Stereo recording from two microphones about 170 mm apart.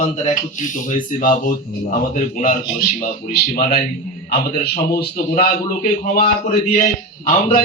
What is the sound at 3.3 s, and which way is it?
Speech, 60° left (ahead or behind).